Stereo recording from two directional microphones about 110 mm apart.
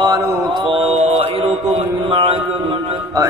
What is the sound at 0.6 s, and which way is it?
Music, 75° right (ahead or behind).